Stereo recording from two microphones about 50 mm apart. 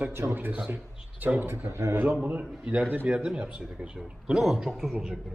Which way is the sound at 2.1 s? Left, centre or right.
Right.